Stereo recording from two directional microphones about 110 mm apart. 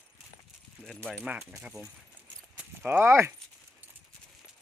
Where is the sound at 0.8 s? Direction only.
10° left (ahead or behind).